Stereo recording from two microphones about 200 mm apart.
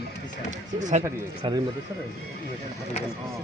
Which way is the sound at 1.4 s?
25° right (ahead or behind).